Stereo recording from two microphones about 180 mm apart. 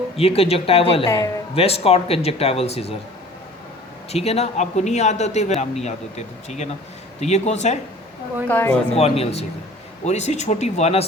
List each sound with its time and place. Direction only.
0.2 s a man's voice: 35° left (ahead or behind)
4.1 s a man's voice: 35° left (ahead or behind)
8.4 s speech: 10° left (ahead or behind)
9.0 s a man's voice: 35° left (ahead or behind)